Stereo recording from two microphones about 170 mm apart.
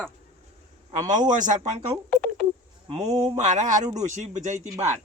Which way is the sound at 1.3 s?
45° right (ahead or behind).